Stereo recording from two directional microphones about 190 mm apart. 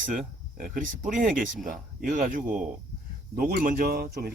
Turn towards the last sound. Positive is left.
turn(degrees=-50)  # may be behind; listen again after turning